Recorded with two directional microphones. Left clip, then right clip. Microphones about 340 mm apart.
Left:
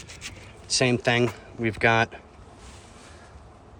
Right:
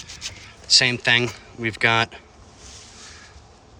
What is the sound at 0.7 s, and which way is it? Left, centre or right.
Speech, centre.